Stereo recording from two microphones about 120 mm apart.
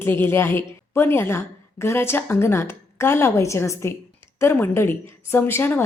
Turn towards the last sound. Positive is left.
turn(degrees=20)  # may be behind; listen again after turning